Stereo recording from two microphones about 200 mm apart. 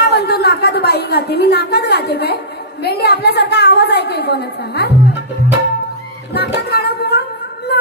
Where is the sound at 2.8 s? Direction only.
55° left (ahead or behind).